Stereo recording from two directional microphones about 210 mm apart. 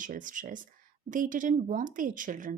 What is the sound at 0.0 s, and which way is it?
A woman's voice, 40° right (ahead or behind).